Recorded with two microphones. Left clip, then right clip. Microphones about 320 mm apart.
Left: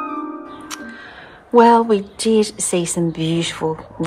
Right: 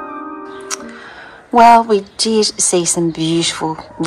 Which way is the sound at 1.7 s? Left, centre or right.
Centre.